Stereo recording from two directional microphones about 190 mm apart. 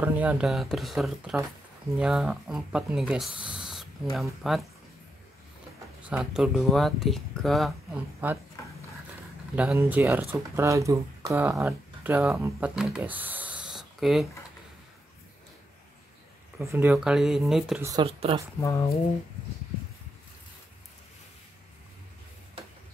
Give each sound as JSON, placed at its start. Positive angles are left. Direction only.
{"t": 0.0, "sound": "speech", "side_deg": -10}
{"t": 6.0, "sound": "speech", "side_deg": -5}
{"t": 9.8, "sound": "speech", "side_deg": -10}
{"t": 16.5, "sound": "speech", "side_deg": -10}
{"t": 18.0, "sound": "speech", "side_deg": -30}
{"t": 18.6, "sound": "speech", "side_deg": 15}